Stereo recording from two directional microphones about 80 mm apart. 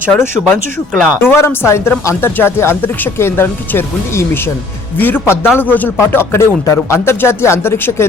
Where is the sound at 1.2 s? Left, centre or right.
Left.